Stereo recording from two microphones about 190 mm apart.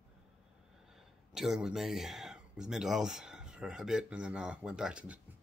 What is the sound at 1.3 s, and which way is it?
Speech, centre (ahead or behind).